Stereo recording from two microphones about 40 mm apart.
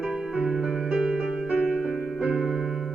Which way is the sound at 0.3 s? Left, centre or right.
Right.